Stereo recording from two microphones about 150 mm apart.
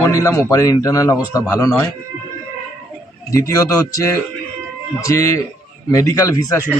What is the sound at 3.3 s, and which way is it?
A man's voice, 20° left (ahead or behind).